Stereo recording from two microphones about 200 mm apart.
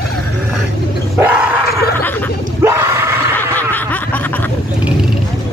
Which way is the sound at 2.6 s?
15° right (ahead or behind).